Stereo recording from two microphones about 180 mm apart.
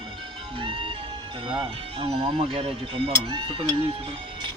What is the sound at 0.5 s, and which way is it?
Music, 30° right (ahead or behind).